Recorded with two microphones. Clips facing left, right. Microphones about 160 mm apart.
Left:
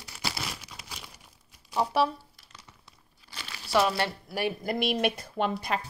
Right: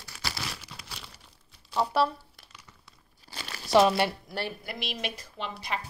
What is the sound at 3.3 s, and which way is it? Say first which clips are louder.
Crumpling: right 5 dB; 40° right (ahead or behind).